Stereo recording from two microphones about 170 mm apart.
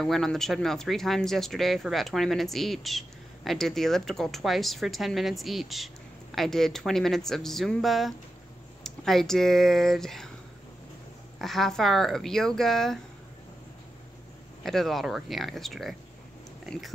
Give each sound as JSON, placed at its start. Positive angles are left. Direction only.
{"t": 0.0, "sound": "speech", "side_deg": 5}
{"t": 11.3, "sound": "speech", "side_deg": 0}
{"t": 14.6, "sound": "speech", "side_deg": 0}